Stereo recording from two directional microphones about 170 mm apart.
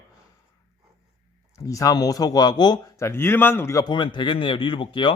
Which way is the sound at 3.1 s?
15° left (ahead or behind).